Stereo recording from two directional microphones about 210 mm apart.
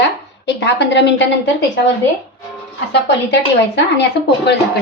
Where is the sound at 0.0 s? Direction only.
55° left (ahead or behind).